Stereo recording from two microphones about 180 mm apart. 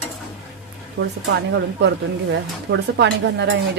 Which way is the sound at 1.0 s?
75° right (ahead or behind).